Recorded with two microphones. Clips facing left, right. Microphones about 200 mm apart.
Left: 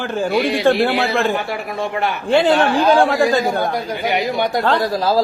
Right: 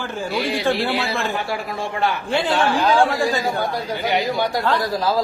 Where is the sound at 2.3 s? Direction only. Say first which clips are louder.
Left 8 dB; 65° left (ahead or behind).